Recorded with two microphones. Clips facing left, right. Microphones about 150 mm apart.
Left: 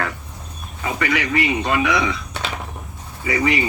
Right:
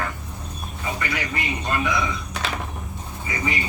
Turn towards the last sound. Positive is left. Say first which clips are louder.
# left 8 dB
turn(degrees=85)